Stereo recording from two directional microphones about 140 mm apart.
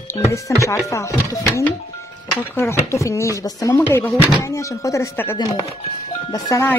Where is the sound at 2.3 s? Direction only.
15° left (ahead or behind).